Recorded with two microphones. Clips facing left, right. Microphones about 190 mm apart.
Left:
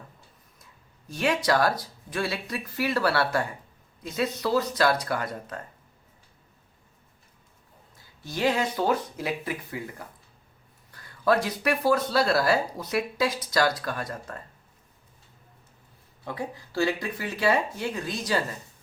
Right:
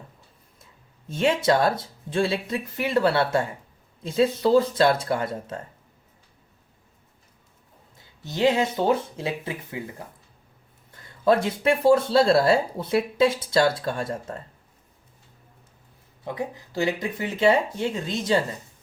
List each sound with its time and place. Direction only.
0.6 s speech: 25° right (ahead or behind)
7.9 s speech: 20° right (ahead or behind)
16.2 s speech: 20° right (ahead or behind)